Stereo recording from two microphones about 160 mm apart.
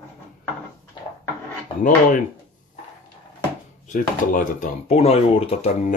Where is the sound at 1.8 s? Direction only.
55° left (ahead or behind).